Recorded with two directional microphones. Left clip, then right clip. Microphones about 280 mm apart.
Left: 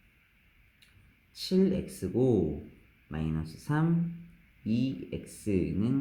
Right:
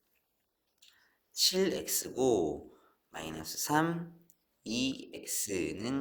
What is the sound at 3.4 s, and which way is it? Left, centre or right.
Speech, right.